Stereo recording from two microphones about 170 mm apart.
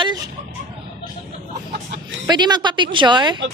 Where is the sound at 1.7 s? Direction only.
85° right.